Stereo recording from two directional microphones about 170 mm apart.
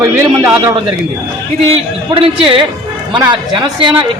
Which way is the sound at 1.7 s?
30° right (ahead or behind).